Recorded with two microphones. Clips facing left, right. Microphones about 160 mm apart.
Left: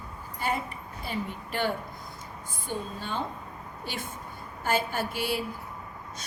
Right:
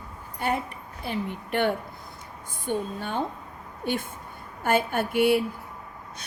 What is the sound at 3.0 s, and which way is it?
A woman's voice, 55° right (ahead or behind).